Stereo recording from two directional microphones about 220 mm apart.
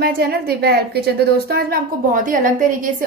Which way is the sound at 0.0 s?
45° right (ahead or behind).